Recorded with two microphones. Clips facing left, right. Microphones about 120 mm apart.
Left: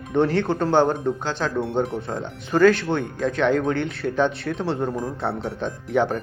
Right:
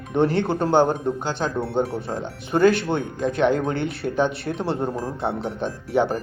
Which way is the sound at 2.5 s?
20° right (ahead or behind).